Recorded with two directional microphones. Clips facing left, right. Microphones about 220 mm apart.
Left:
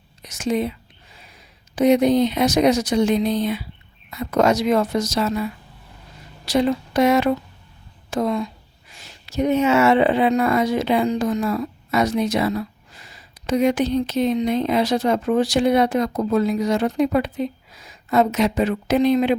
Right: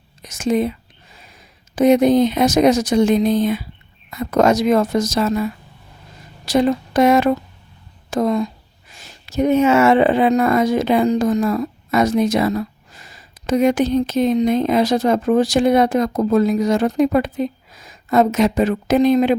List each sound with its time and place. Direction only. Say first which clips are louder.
0.2 s whispering: right 4 dB; 45° right (ahead or behind)
1.7 s a woman's voice: right 3 dB; 45° right (ahead or behind)